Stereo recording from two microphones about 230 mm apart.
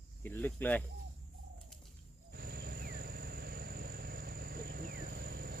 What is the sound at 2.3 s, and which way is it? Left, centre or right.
Vehicle, right.